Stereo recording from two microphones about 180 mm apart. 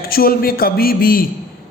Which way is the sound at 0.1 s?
55° left (ahead or behind).